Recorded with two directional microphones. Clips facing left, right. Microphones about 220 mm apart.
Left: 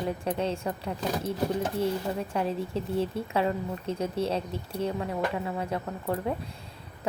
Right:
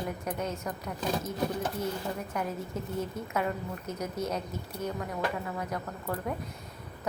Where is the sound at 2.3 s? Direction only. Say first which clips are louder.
Left 5 dB; 30° left (ahead or behind).